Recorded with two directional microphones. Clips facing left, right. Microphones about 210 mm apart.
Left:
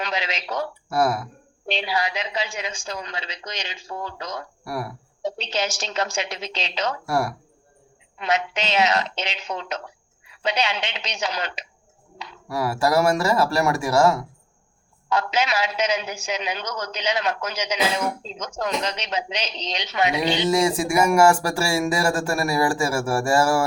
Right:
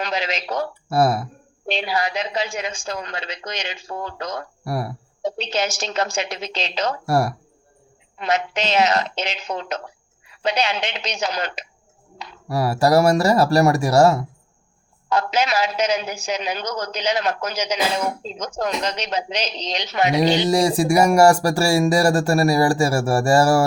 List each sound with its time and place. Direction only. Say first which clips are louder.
0.0 s a woman's voice: right 3 dB; 40° right (ahead or behind)
4.6 s speech: right 4 dB; 35° right (ahead or behind)
5.2 s a woman's voice: right 3 dB; 50° right (ahead or behind)